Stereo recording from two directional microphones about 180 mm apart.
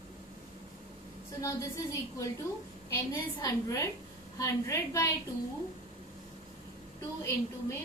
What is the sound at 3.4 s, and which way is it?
A woman's voice, 20° left (ahead or behind).